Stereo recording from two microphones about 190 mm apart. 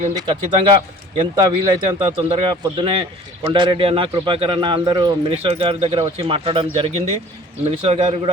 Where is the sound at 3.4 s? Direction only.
25° right (ahead or behind).